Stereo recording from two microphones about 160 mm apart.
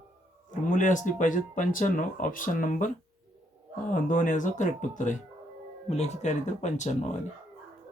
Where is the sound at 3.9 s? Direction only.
55° left (ahead or behind).